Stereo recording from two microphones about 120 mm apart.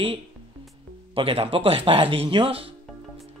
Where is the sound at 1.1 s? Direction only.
50° right (ahead or behind).